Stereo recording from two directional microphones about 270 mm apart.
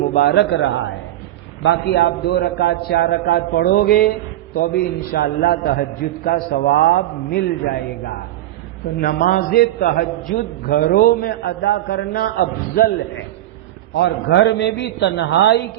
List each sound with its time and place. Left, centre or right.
0.1 s a man's voice: left
5.1 s a man's voice: left